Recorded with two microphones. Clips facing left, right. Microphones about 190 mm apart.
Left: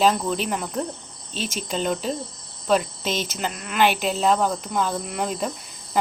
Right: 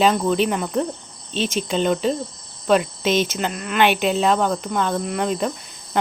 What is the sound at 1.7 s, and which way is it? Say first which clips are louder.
Speech: right 4 dB; 5° left (ahead or behind).